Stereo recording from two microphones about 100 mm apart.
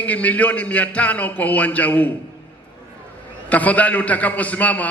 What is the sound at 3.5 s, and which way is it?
A man's voice, 15° left (ahead or behind).